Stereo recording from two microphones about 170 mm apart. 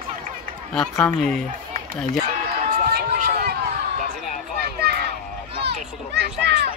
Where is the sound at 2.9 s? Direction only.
70° right (ahead or behind).